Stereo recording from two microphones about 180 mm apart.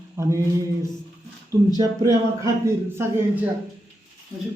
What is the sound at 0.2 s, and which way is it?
Speech, 15° right (ahead or behind).